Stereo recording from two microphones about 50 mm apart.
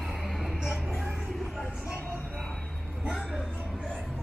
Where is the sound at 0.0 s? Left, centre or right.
Centre.